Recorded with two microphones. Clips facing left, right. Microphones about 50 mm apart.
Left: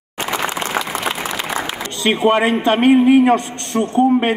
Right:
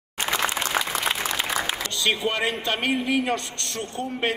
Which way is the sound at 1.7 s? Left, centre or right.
Left.